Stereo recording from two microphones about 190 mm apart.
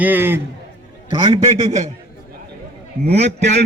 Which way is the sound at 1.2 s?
30° right (ahead or behind).